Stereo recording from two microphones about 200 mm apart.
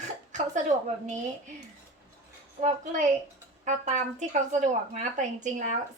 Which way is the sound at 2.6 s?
35° right (ahead or behind).